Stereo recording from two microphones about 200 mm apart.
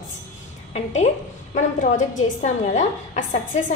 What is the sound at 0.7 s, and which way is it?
A woman's voice, 35° left (ahead or behind).